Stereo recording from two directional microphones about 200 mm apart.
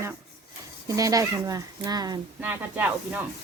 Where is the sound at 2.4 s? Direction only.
10° right (ahead or behind).